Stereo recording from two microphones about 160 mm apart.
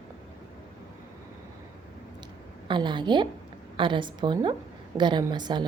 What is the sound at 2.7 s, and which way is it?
A woman's voice, 30° right (ahead or behind).